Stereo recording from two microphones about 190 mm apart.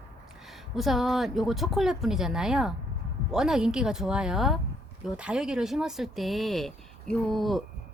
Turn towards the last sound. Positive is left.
turn(degrees=0)  # may be behind; listen again after turning